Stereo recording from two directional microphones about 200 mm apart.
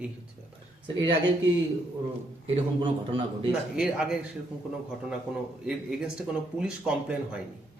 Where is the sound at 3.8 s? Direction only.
5° right (ahead or behind).